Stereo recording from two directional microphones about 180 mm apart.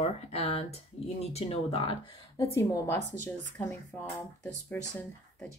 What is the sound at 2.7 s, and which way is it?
Speech, 15° left (ahead or behind).